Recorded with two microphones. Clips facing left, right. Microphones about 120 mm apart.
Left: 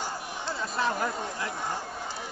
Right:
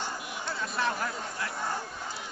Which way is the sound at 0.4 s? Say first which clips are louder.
Left 2 dB; 30° left (ahead or behind).